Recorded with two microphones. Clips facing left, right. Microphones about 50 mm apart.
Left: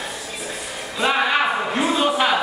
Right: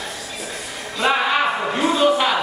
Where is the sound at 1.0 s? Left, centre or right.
Centre.